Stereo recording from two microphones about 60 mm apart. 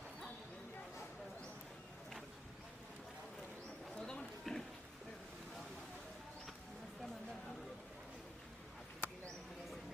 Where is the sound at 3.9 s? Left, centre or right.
Centre.